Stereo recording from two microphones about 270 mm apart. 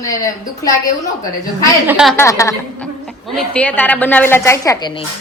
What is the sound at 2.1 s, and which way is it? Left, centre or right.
A woman's voice, centre.